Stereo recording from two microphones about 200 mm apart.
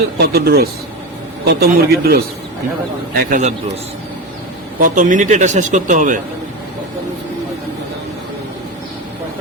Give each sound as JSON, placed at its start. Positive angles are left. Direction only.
{"t": 0.3, "sound": "a man's voice", "side_deg": -50}
{"t": 4.8, "sound": "speech", "side_deg": -40}